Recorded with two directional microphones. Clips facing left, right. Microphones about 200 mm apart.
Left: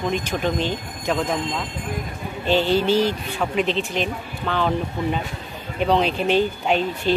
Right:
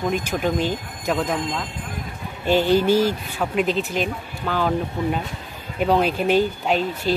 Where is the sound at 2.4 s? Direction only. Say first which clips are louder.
Right 2 dB; 15° right (ahead or behind).